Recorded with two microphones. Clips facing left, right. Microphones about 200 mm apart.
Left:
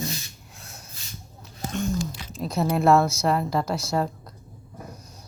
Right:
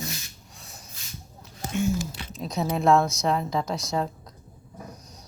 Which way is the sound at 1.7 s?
5° right (ahead or behind).